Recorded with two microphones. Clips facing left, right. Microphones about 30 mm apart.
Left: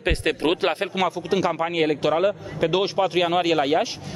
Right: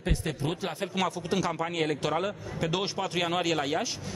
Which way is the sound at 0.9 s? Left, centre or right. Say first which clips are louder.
Left 6 dB; left.